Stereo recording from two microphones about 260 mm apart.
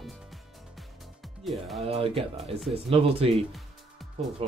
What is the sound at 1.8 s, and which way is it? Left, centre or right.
Speech, right.